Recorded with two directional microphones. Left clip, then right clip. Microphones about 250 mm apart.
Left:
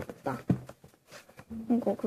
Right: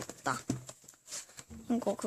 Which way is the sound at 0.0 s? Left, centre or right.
Centre.